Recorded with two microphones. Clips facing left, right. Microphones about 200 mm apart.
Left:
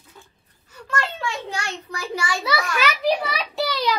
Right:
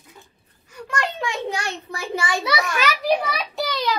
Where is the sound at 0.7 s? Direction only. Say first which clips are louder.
Right 1 dB; 15° right (ahead or behind).